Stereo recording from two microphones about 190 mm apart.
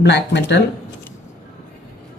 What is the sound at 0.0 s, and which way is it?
Speech, 65° left (ahead or behind).